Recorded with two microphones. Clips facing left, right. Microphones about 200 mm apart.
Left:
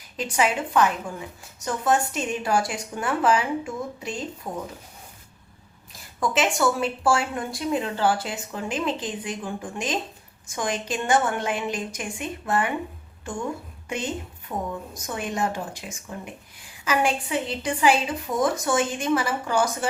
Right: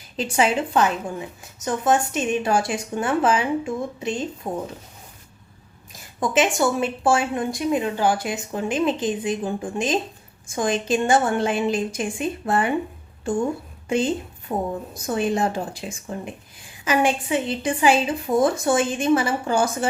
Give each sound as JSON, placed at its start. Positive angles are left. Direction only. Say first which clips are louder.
{"t": 0.2, "sound": "speech", "louder": "right 3 dB", "side_deg": -25}
{"t": 6.1, "sound": "speech", "louder": "right 3 dB", "side_deg": -20}
{"t": 13.8, "sound": "a woman's voice", "louder": "right 8 dB", "side_deg": -30}